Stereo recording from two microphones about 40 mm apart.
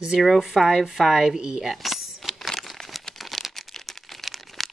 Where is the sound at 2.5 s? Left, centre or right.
Centre.